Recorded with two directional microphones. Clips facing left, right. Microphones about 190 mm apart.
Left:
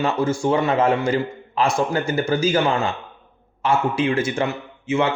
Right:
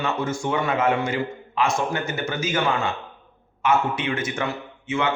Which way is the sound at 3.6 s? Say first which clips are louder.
Left 3 dB; 30° left (ahead or behind).